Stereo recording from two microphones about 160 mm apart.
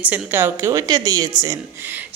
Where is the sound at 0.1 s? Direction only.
15° right (ahead or behind).